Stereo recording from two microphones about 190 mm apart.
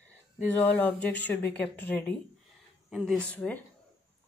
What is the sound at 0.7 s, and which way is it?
Speech, 10° left (ahead or behind).